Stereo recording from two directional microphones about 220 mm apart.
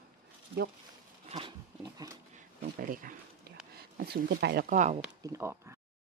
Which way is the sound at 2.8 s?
40° right (ahead or behind).